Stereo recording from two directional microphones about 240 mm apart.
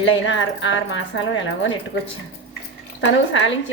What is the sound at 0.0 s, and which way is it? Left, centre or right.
Speech, left.